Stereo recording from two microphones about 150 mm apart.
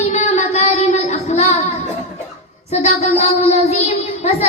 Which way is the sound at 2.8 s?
45° left (ahead or behind).